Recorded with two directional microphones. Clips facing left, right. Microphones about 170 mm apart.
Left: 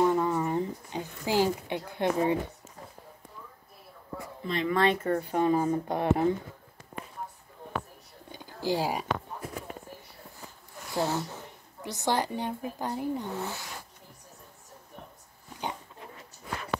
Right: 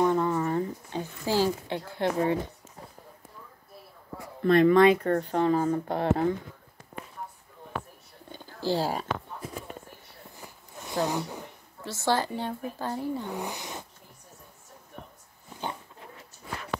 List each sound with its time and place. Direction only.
0.0 s a sound: 10° left (ahead or behind)
4.4 s speech: 55° right (ahead or behind)
4.9 s a woman's voice: 5° left (ahead or behind)
8.3 s a sound: 15° left (ahead or behind)
10.8 s speech: 20° right (ahead or behind)
11.8 s a woman's voice: 15° left (ahead or behind)
13.3 s speech: 15° right (ahead or behind)